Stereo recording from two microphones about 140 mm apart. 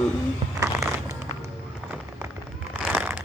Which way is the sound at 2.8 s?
10° right (ahead or behind).